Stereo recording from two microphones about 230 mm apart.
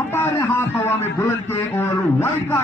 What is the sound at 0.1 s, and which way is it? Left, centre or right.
A man's voice, centre.